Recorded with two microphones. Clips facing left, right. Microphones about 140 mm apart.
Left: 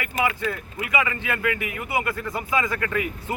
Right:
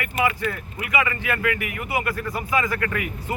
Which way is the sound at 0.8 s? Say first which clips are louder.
Right 1 dB; 15° left (ahead or behind).